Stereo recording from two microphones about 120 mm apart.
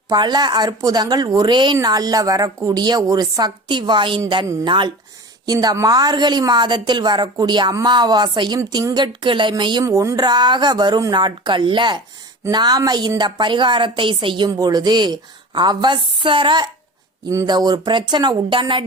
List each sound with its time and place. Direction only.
0.1 s a woman's voice: 35° right (ahead or behind)
9.8 s a woman's voice: 25° right (ahead or behind); by 16.6 s 40° right (ahead or behind)
17.2 s a woman's voice: 30° right (ahead or behind)